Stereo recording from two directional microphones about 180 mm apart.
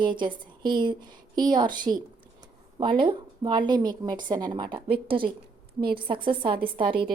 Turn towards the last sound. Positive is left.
turn(degrees=-25)  # may be behind; listen again after turning